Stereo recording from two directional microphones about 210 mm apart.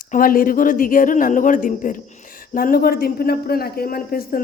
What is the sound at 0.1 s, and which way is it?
A man's voice, 40° left (ahead or behind).